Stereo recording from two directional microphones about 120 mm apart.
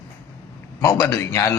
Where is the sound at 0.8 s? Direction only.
25° left (ahead or behind).